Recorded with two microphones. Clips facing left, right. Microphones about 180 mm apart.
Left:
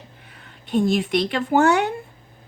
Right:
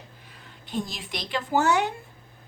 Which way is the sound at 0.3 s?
65° left (ahead or behind).